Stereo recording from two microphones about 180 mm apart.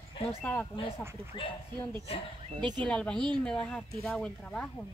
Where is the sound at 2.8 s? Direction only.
5° left (ahead or behind).